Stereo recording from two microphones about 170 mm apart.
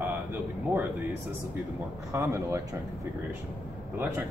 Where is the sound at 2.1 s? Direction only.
15° right (ahead or behind).